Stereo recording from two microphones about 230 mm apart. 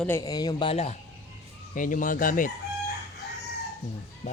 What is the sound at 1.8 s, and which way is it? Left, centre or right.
Speech, left.